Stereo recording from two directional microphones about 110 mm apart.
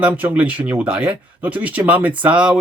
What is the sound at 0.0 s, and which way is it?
Speech, 15° right (ahead or behind).